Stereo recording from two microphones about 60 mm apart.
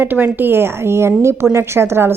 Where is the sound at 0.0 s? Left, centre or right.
Right.